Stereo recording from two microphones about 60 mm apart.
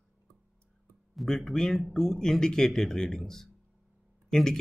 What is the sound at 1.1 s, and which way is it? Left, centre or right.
Speech, centre.